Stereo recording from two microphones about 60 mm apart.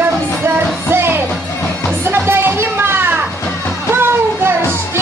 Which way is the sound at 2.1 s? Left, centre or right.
Right.